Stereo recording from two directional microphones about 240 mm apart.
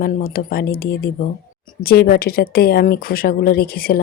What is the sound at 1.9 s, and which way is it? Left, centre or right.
Speech, left.